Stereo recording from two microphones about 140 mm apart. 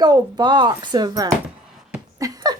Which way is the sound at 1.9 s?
25° right (ahead or behind).